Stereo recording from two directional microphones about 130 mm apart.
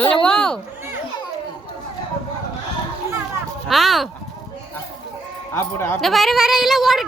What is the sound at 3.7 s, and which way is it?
Speech, centre (ahead or behind).